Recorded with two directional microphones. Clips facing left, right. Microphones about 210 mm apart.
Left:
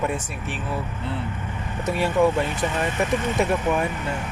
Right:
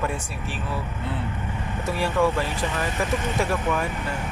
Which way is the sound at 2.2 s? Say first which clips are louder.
Left 3 dB; 20° left (ahead or behind).